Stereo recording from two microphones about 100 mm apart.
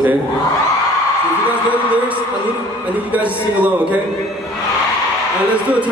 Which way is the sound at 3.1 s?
15° right (ahead or behind).